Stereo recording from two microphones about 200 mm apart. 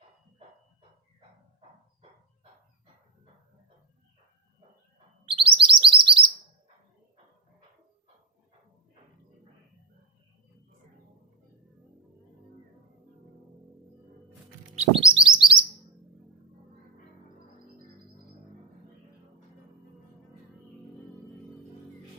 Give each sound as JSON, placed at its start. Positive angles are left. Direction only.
{"t": 5.3, "sound": "chirp", "side_deg": -25}
{"t": 14.8, "sound": "bird", "side_deg": -25}
{"t": 15.3, "sound": "chirp", "side_deg": -5}